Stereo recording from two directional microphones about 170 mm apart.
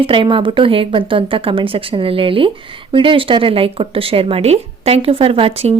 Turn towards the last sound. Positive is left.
turn(degrees=-35)  # may be behind; listen again after turning